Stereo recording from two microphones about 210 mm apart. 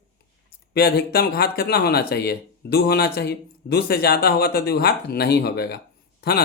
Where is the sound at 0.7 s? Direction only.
50° left (ahead or behind).